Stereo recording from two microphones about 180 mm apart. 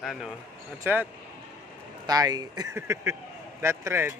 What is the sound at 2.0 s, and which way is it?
Speech, 20° right (ahead or behind).